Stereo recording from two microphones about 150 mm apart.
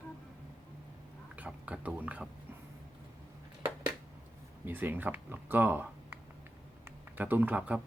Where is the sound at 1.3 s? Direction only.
10° right (ahead or behind).